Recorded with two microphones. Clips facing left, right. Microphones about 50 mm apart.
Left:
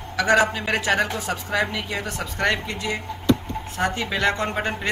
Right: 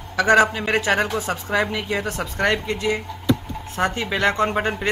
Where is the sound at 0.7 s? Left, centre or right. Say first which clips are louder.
Right 2 dB; right.